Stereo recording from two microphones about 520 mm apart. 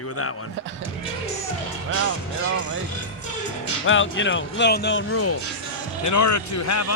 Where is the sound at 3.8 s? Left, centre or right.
Left.